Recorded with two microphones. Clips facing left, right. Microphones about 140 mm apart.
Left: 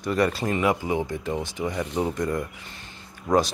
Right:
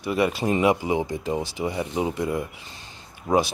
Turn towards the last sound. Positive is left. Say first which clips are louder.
# even
turn(degrees=-20)  # may be behind; listen again after turning